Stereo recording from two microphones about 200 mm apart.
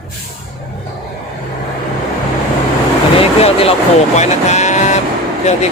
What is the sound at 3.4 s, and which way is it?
Speech, 30° left (ahead or behind).